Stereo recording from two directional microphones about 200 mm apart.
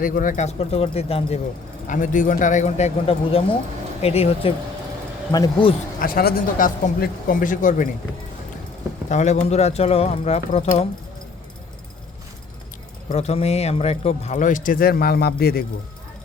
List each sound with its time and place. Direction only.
0.0 s speech: 45° left (ahead or behind)
1.9 s speech: 40° left (ahead or behind); by 5.7 s 20° left (ahead or behind)
6.0 s speech: 45° left (ahead or behind)
9.0 s speech: 35° left (ahead or behind)
13.1 s speech: 30° left (ahead or behind); by 15.6 s 50° left (ahead or behind)